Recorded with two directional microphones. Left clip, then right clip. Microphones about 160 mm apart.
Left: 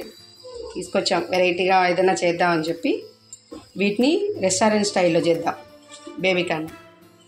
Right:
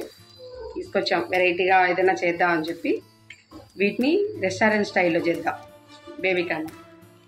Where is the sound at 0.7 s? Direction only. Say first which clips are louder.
Left 2 dB; 30° left (ahead or behind).